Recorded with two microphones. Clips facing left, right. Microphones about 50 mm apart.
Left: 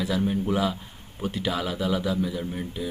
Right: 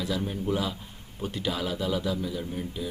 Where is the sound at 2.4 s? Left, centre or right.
Left.